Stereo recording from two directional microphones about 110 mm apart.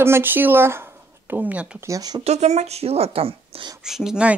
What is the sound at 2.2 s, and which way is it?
A woman's voice, 90° right.